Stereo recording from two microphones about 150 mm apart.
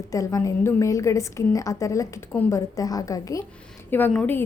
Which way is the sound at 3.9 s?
10° left (ahead or behind).